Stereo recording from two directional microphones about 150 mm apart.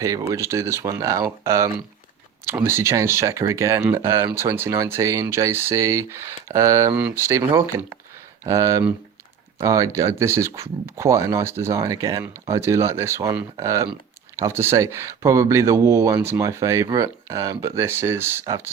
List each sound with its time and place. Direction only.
0.0 s speech: 20° right (ahead or behind)